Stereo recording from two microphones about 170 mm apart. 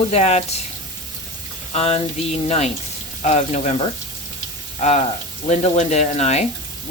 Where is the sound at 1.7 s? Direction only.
40° left (ahead or behind).